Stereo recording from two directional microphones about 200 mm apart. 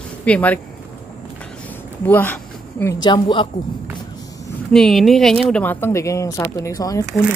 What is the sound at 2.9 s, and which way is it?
Speech, 20° left (ahead or behind).